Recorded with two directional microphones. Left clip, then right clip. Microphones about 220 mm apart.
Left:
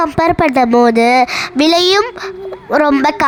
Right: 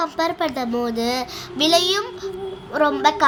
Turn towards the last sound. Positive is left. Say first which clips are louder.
# left 5 dB
turn(degrees=45)  # may be behind; listen again after turning